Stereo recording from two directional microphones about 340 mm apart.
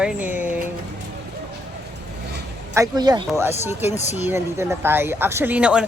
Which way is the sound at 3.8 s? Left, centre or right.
Centre.